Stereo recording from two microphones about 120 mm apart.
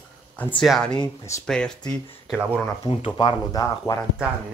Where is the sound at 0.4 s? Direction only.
15° left (ahead or behind).